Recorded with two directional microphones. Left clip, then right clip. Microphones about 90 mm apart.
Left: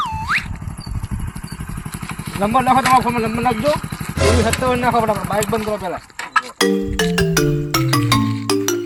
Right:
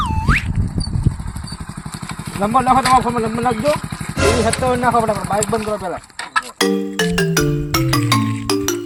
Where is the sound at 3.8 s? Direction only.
5° right (ahead or behind).